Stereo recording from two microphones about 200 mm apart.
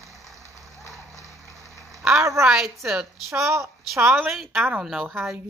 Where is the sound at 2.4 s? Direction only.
Centre (ahead or behind).